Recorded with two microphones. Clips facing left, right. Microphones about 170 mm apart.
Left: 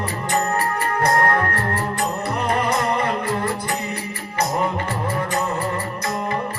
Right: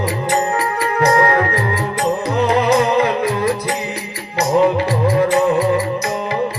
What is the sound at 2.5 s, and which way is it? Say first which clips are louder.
Music: right 6 dB; 75° right (ahead or behind).